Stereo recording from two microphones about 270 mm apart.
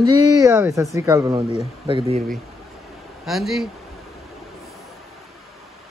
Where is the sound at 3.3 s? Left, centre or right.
Centre.